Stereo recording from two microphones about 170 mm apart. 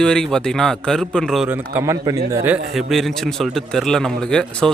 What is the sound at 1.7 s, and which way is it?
Speech, 20° right (ahead or behind).